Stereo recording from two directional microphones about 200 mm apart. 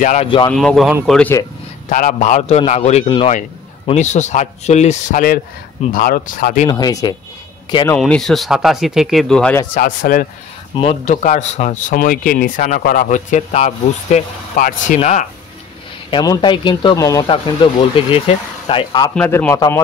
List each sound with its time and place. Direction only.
0.0 s speech: 35° left (ahead or behind)
0.5 s speech: centre (ahead or behind)
1.9 s speech: 40° left (ahead or behind)
6.7 s speech: 20° left (ahead or behind)
7.9 s speech: 5° left (ahead or behind)
9.8 s speech: 45° left (ahead or behind)
10.8 s speech: 30° left (ahead or behind)
16.1 s speech: 20° left (ahead or behind)
19.1 s a man's voice: 10° left (ahead or behind)